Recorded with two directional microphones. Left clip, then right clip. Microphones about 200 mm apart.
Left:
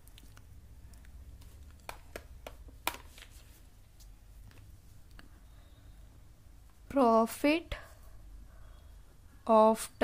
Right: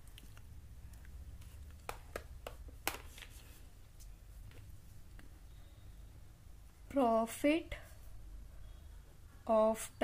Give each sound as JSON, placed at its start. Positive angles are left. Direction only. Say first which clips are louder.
{"t": 6.9, "sound": "speech", "louder": "left 6 dB", "side_deg": 30}
{"t": 9.4, "sound": "speech", "louder": "left 7 dB", "side_deg": 30}